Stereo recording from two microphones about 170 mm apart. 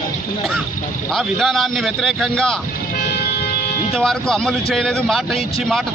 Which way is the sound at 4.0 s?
5° left (ahead or behind).